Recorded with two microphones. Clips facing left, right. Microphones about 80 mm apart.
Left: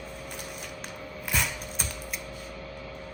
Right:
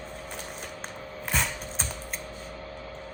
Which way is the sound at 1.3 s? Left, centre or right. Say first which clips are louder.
Right 1 dB; right.